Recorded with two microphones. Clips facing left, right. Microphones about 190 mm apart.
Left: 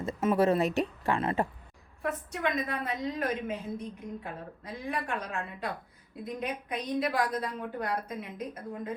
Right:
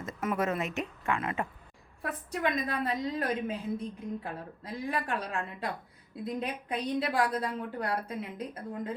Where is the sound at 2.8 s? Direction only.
30° right (ahead or behind).